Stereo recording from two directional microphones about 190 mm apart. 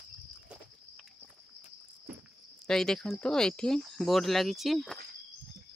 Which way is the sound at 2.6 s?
5° left (ahead or behind).